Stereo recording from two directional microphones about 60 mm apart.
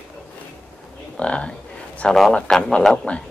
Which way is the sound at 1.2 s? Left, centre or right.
Centre.